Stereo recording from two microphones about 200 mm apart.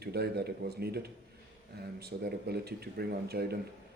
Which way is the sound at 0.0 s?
55° right (ahead or behind).